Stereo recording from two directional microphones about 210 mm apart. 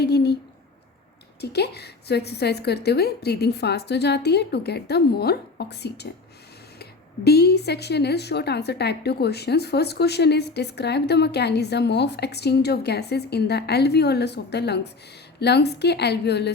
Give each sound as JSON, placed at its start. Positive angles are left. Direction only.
{"t": 0.0, "sound": "a woman's voice", "side_deg": 50}
{"t": 1.4, "sound": "a woman's voice", "side_deg": 50}
{"t": 7.3, "sound": "a woman's voice", "side_deg": 50}